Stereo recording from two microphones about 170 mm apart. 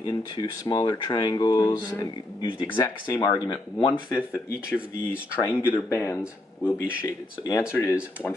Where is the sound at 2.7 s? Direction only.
10° left (ahead or behind).